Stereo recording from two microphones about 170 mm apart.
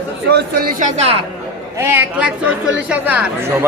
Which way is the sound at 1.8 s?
10° right (ahead or behind).